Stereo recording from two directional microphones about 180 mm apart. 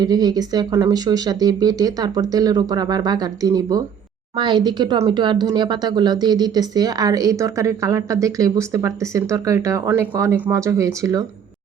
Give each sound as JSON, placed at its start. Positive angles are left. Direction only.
{"t": 0.0, "sound": "a woman's voice", "side_deg": -20}